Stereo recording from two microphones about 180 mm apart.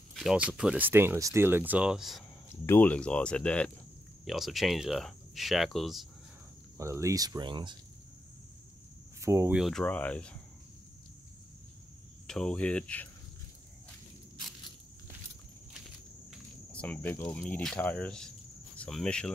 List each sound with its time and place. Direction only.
0.1 s speech: centre (ahead or behind)
2.5 s speech: 15° left (ahead or behind)
6.8 s speech: 15° right (ahead or behind)
9.2 s speech: 15° right (ahead or behind)
9.6 s speech: centre (ahead or behind)
12.3 s speech: 5° left (ahead or behind)
16.3 s speech: 5° left (ahead or behind)